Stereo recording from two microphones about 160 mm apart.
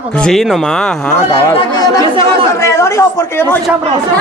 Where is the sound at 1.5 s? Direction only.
25° left (ahead or behind).